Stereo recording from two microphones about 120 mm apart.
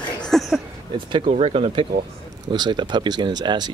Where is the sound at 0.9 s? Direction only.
45° right (ahead or behind).